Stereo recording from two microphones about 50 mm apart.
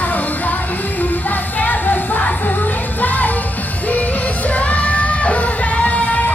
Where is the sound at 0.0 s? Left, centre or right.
Left.